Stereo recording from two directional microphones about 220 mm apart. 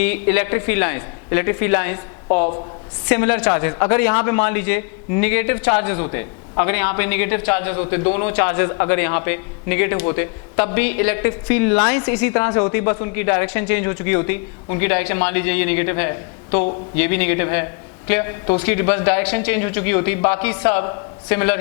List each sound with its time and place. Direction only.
0.0 s a man's voice: 10° left (ahead or behind)
2.2 s a woman's voice: 30° left (ahead or behind)
3.1 s a man's voice: 20° left (ahead or behind)
16.5 s a man's voice: 30° left (ahead or behind)
17.0 s a man's voice: 10° left (ahead or behind)